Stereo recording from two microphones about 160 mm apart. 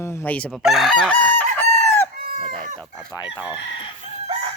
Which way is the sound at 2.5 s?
55° right (ahead or behind).